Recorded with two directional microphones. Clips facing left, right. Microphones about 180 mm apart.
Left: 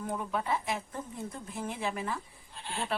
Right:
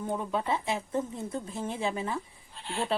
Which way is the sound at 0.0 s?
25° right (ahead or behind).